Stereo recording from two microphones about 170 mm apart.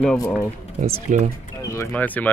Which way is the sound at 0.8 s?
45° right (ahead or behind).